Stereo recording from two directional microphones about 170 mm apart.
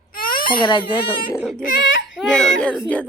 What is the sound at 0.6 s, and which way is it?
Speech, 30° left (ahead or behind).